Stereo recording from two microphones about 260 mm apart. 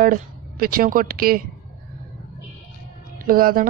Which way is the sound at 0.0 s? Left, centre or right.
Right.